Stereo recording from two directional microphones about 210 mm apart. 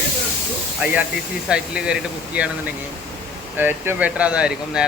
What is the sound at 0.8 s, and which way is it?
Speech, 5° right (ahead or behind).